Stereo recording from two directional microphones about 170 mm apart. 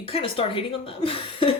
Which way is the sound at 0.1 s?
35° left (ahead or behind).